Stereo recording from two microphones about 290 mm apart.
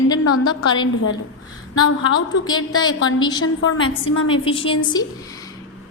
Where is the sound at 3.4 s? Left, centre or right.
Left.